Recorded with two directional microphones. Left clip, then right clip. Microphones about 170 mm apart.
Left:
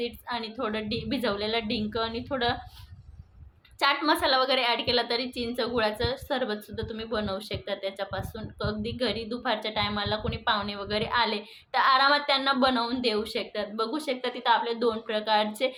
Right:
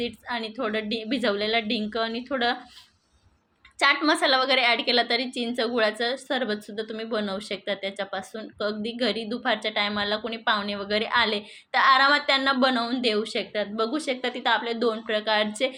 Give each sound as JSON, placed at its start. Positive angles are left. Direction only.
{"t": 0.0, "sound": "a woman's voice", "side_deg": -15}
{"t": 3.8, "sound": "a woman's voice", "side_deg": -20}